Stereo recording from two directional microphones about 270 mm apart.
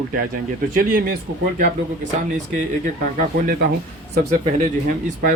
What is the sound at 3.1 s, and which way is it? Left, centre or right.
Speech, right.